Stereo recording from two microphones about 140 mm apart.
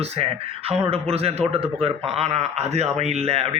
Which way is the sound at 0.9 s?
45° right (ahead or behind).